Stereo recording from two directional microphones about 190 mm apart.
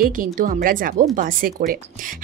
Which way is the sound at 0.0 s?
45° right (ahead or behind).